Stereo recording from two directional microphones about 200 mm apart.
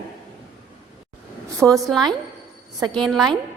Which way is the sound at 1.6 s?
5° right (ahead or behind).